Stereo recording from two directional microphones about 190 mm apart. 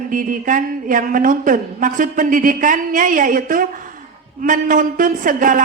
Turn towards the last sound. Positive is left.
turn(degrees=-45)  # may be behind; listen again after turning